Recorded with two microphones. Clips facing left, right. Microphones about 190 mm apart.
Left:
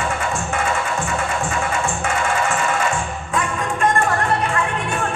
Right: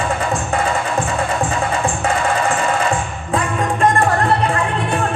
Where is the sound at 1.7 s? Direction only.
35° right (ahead or behind).